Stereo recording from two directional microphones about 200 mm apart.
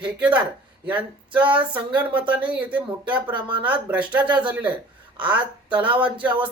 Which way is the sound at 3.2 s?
25° right (ahead or behind).